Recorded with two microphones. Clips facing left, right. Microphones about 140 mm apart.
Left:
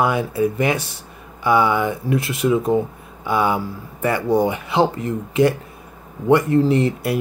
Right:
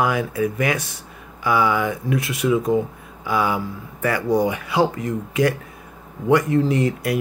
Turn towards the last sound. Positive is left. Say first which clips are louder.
# left 2 dB
turn(degrees=30)  # may be behind; listen again after turning